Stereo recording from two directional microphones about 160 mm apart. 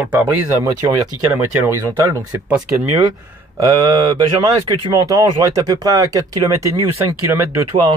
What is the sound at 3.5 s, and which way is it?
Speech, 20° right (ahead or behind).